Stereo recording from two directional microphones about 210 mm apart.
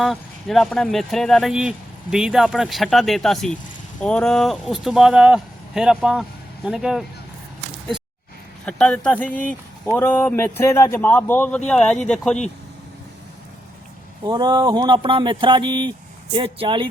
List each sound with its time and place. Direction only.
0.0 s speech: centre (ahead or behind)
8.6 s a man's voice: 5° left (ahead or behind)
14.3 s speech: 20° right (ahead or behind)